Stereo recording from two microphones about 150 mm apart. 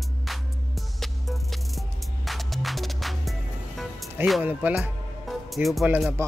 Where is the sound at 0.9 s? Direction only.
Centre (ahead or behind).